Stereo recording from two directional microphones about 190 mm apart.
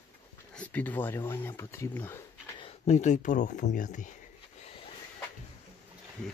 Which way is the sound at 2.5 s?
30° left (ahead or behind).